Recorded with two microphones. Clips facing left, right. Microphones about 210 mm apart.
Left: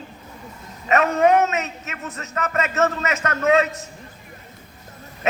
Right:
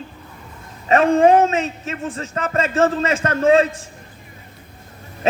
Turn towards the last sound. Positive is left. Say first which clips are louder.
# right 4 dB
turn(degrees=-30)  # may be behind; listen again after turning